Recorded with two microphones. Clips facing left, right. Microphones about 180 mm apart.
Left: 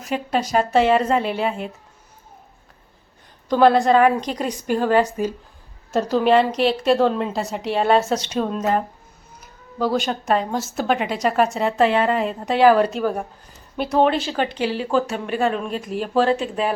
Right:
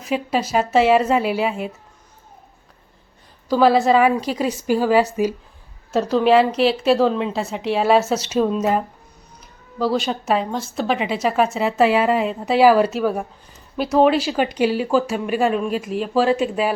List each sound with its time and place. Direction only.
0.0 s a woman's voice: 5° right (ahead or behind)
3.5 s a woman's voice: 5° right (ahead or behind)